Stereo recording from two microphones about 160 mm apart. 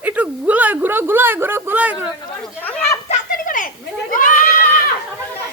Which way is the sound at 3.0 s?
50° left (ahead or behind).